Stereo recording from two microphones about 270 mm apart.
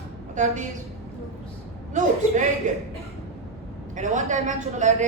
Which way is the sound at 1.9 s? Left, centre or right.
Right.